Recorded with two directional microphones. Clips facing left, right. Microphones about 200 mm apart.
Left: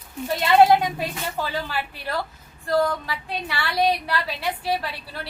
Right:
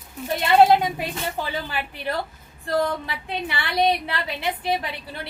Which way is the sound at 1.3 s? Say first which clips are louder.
Left 1 dB; 20° right (ahead or behind).